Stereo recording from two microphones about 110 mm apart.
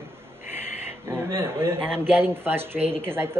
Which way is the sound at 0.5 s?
20° right (ahead or behind).